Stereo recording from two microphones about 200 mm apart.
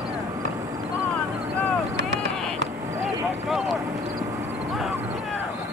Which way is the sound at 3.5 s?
Centre (ahead or behind).